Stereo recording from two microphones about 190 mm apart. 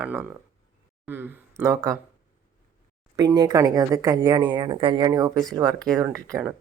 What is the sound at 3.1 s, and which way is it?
Speech, 20° right (ahead or behind).